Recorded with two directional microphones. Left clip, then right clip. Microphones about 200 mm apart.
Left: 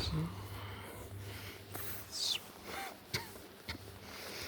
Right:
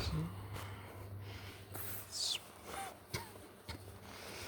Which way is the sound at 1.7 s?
5° right (ahead or behind).